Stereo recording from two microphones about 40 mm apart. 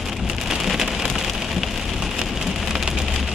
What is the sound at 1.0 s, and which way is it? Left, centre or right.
Rain on surface, centre.